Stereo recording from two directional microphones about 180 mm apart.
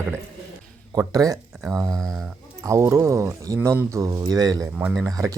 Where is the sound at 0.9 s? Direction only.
20° right (ahead or behind).